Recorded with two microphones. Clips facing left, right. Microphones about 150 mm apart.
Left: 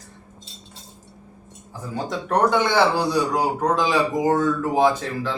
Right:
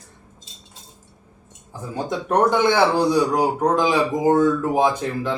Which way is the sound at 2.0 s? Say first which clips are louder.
Right 2 dB; 15° right (ahead or behind).